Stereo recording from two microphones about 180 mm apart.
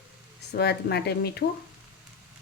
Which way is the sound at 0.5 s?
65° left (ahead or behind).